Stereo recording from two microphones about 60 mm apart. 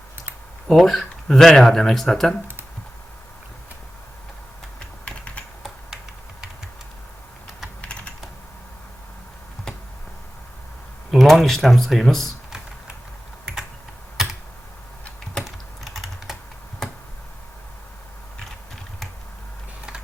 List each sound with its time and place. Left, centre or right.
0.7 s speech: centre
5.0 s typing: centre
7.8 s typing: left
9.7 s a sound: centre
11.1 s speech: centre
14.2 s computer keyboard: centre
15.4 s typing: centre